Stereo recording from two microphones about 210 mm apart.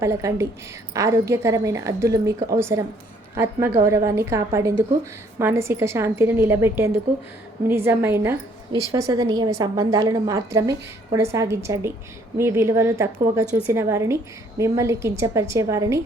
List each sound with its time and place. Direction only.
0.0 s a woman's voice: 15° right (ahead or behind)